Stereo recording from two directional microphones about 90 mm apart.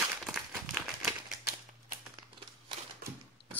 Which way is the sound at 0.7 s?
Centre (ahead or behind).